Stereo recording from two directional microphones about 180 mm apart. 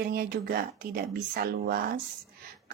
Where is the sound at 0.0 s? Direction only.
55° right (ahead or behind).